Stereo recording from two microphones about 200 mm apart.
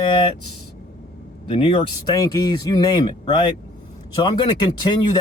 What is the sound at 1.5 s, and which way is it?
Speech, 25° left (ahead or behind).